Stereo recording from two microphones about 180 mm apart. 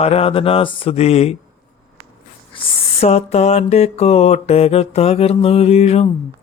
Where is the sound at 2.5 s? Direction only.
30° left (ahead or behind).